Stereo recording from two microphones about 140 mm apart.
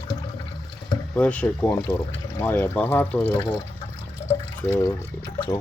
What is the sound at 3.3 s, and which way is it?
Speech, 30° left (ahead or behind).